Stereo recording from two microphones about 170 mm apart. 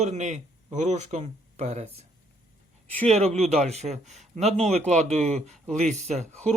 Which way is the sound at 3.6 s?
40° right (ahead or behind).